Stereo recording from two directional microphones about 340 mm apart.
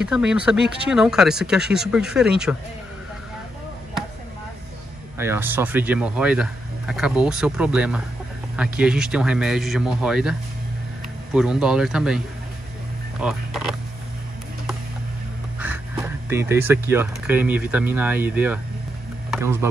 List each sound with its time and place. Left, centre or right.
0.0 s speech: centre
5.1 s speech: centre
11.3 s speech: centre
13.2 s speech: centre
16.3 s speech: centre